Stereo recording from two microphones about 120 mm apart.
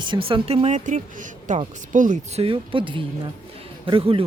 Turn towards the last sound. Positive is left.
turn(degrees=-50)  # may be behind; listen again after turning